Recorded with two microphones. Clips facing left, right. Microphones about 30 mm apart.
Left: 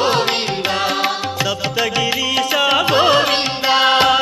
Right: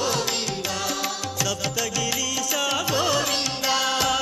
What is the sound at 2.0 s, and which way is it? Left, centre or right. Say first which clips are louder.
Music: left 9 dB; left.